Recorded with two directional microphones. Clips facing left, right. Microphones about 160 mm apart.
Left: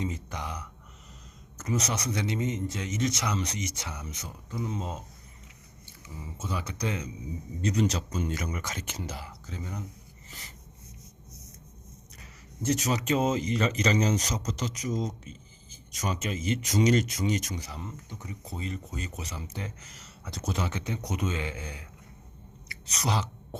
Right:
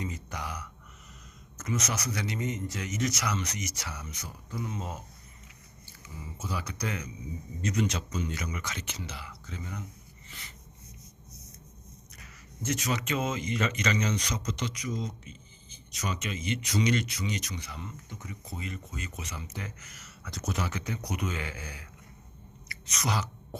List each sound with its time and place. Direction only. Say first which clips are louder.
0.0 s speech: left 3 dB; 25° left (ahead or behind)
6.6 s speech: left 4 dB; 25° left (ahead or behind); by 9.4 s 40° left (ahead or behind)
10.2 s writing: left 1 dB; 40° left (ahead or behind)
12.6 s speech: left 4 dB; 35° left (ahead or behind)